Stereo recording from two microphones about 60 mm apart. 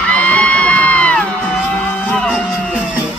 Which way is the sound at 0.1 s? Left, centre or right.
Centre.